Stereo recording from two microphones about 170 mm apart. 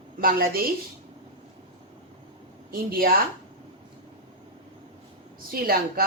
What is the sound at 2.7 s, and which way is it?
Speech, 60° right (ahead or behind).